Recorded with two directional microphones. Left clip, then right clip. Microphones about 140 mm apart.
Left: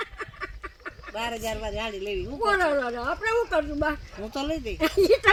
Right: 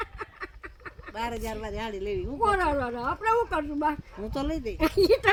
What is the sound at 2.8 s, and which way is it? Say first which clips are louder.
A woman's voice: even; 35° right (ahead or behind).